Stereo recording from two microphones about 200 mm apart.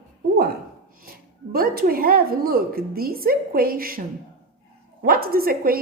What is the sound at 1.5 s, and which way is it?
A woman's voice, 45° right (ahead or behind).